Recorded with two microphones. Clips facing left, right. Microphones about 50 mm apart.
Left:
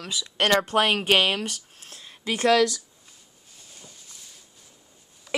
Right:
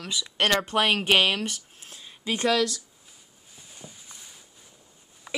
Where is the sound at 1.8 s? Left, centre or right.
Centre.